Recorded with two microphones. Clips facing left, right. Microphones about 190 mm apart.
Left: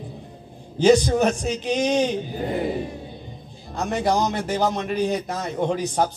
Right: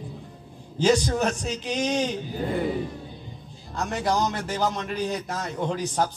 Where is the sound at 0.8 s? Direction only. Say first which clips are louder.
Left 5 dB; 20° left (ahead or behind).